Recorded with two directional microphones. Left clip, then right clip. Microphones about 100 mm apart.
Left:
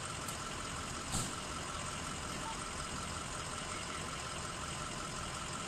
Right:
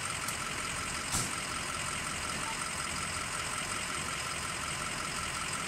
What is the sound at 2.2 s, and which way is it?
Vehicle, 45° right (ahead or behind).